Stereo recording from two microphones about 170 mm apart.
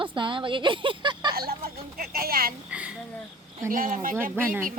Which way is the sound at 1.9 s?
60° right (ahead or behind).